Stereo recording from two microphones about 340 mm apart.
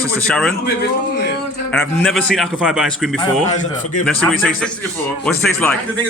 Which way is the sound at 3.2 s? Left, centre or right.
Left.